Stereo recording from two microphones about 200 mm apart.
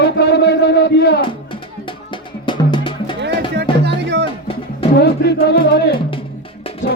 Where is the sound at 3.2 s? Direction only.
55° right (ahead or behind).